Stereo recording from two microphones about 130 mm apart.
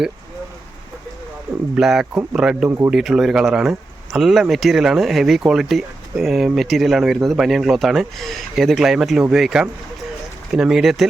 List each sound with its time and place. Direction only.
1.7 s speech: 5° right (ahead or behind)
2.6 s speech: 20° right (ahead or behind)
2.9 s speech: centre (ahead or behind)